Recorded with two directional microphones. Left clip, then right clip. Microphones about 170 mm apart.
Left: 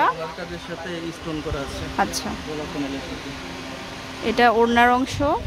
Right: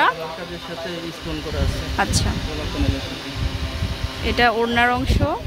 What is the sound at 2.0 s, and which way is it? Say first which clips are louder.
Speech: right 1 dB; 10° left (ahead or behind).